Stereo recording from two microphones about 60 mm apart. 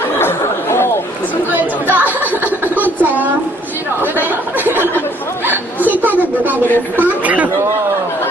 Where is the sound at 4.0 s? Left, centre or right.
Right.